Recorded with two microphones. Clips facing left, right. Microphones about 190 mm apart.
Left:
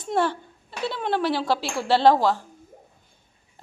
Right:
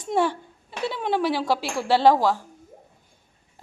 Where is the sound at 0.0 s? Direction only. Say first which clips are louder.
Right 1 dB; 15° right (ahead or behind).